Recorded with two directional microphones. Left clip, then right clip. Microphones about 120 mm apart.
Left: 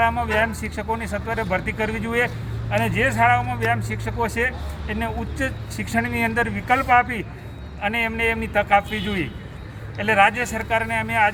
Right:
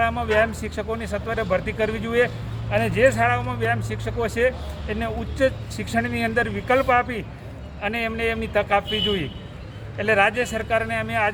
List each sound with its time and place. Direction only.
0.0 s speech: 35° right (ahead or behind)